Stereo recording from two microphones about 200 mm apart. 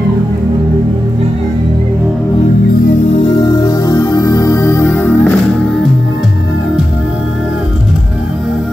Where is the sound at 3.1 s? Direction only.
25° left (ahead or behind); by 5.8 s 10° left (ahead or behind).